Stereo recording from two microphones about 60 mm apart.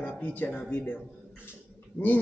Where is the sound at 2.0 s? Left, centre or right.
Left.